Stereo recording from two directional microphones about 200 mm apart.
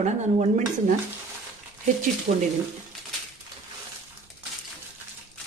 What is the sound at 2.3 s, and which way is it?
Speech, 50° right (ahead or behind).